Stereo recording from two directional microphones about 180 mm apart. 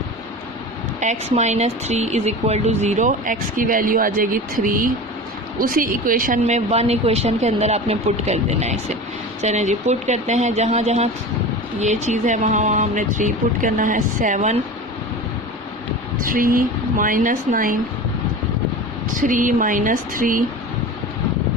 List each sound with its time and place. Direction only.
0.9 s a woman's voice: 40° right (ahead or behind)
16.2 s speech: 50° right (ahead or behind)
19.2 s speech: 50° right (ahead or behind)